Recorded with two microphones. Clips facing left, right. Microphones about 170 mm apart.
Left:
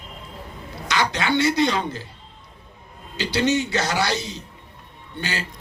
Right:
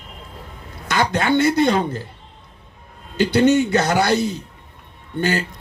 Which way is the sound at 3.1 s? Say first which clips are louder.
Right 7 dB; 55° right (ahead or behind).